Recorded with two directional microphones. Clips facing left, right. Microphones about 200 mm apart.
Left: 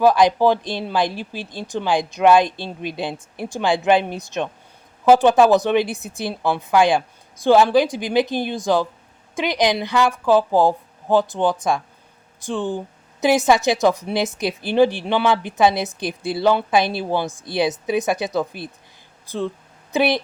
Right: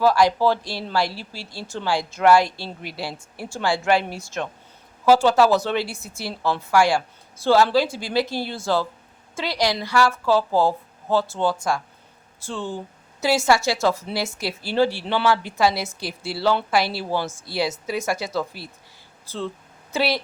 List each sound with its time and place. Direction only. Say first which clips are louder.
0.0 s a woman's voice: left 3 dB; 20° left (ahead or behind)